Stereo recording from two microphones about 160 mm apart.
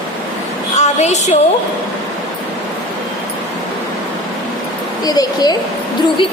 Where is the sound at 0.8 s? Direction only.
45° left (ahead or behind).